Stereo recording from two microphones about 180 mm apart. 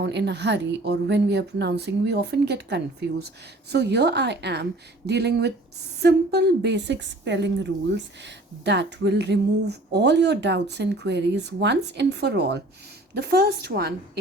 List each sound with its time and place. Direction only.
0.0 s a woman's voice: 70° right (ahead or behind)